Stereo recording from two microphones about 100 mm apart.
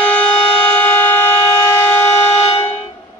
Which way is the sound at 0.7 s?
15° left (ahead or behind).